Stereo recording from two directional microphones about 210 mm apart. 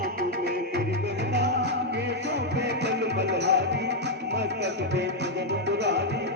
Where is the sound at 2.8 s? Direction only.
55° right (ahead or behind).